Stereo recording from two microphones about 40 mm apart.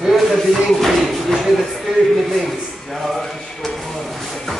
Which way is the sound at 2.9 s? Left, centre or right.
Centre.